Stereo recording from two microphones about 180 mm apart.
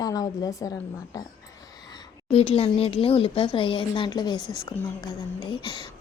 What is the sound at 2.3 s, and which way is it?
A woman's voice, 35° left (ahead or behind).